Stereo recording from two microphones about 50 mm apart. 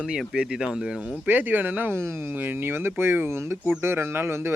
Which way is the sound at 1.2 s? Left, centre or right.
Right.